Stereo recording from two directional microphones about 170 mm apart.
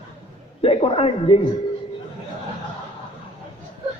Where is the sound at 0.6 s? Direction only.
35° left (ahead or behind).